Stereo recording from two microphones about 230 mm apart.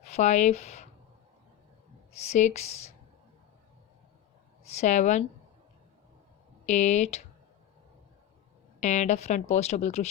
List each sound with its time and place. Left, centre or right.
0.0 s speech: left
2.3 s speech: left
4.8 s speech: left
6.7 s speech: left
8.8 s speech: left